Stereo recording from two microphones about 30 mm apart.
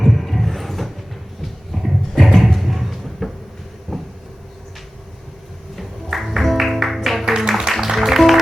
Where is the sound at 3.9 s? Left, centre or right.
Centre.